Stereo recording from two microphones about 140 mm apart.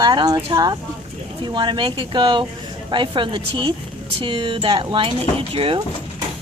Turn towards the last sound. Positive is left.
turn(degrees=-40)  # may be behind; listen again after turning